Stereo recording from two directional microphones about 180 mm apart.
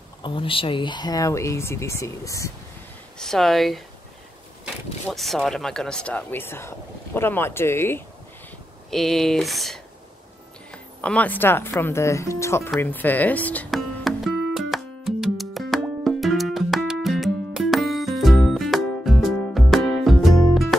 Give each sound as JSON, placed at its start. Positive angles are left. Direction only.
{"t": 0.2, "sound": "speech", "side_deg": 30}
{"t": 3.2, "sound": "speech", "side_deg": 0}
{"t": 5.1, "sound": "speech", "side_deg": 0}
{"t": 8.9, "sound": "speech", "side_deg": 0}
{"t": 12.7, "sound": "music", "side_deg": 10}